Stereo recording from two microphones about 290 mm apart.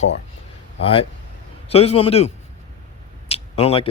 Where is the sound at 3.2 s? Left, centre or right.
Centre.